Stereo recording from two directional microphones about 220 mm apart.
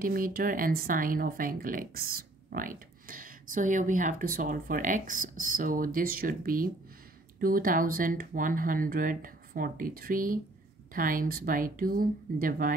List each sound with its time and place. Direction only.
0.0 s speech: 40° right (ahead or behind)